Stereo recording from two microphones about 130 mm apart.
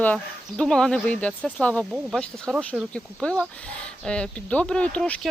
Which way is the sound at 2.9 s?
10° left (ahead or behind).